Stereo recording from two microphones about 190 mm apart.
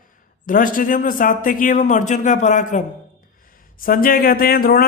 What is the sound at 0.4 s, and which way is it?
Speech, 45° left (ahead or behind).